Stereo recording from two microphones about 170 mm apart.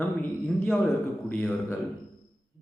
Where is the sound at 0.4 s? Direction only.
5° left (ahead or behind).